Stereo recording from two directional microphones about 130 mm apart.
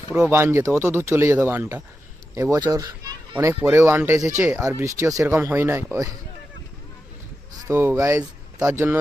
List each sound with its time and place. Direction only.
0.1 s a child's voice: 15° right (ahead or behind)
7.6 s speech: 20° right (ahead or behind)